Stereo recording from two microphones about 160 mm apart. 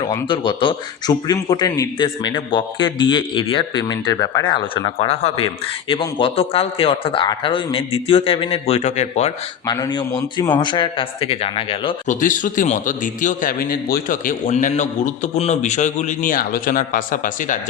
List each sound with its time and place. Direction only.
0.3 s a man's voice: 30° left (ahead or behind)
9.6 s a man's voice: 25° left (ahead or behind)
12.0 s a man's voice: 55° left (ahead or behind)